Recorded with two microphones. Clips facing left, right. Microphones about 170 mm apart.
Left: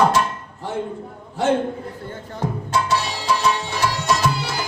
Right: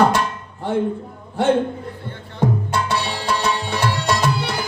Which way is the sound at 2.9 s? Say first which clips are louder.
Left 1 dB; 60° right (ahead or behind).